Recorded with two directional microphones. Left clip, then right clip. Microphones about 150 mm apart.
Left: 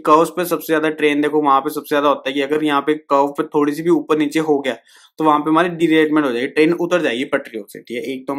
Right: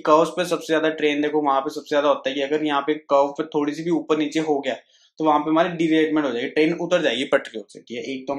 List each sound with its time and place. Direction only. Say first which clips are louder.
0.0 s speech: left 4 dB; 40° left (ahead or behind); by 7.6 s 25° left (ahead or behind)
7.9 s speech: left 4 dB; 40° left (ahead or behind)